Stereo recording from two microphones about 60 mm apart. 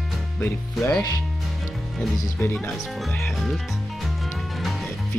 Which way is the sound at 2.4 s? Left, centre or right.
Left.